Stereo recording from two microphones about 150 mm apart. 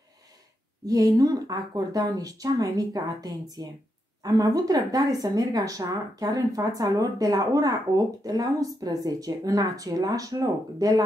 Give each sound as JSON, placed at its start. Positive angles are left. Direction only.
{"t": 0.8, "sound": "speech", "side_deg": -25}